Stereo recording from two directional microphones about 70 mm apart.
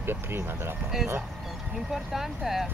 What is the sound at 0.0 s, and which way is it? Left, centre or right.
Speech, right.